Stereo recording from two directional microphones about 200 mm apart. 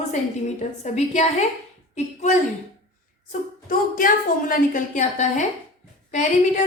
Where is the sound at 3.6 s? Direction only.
45° left (ahead or behind).